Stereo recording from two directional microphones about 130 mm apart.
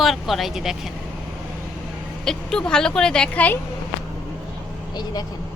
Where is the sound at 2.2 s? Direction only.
5° left (ahead or behind).